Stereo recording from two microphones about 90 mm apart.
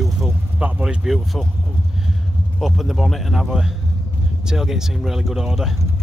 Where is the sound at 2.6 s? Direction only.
Centre (ahead or behind).